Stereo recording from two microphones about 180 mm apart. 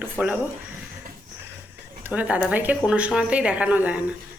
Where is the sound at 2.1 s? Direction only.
10° right (ahead or behind).